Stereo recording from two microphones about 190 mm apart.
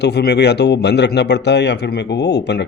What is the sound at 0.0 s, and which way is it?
Speech, 60° left (ahead or behind).